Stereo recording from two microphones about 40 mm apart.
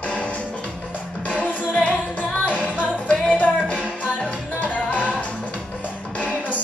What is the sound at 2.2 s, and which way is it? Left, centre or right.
Music, left.